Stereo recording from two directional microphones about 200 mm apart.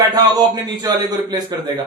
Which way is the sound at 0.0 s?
20° right (ahead or behind).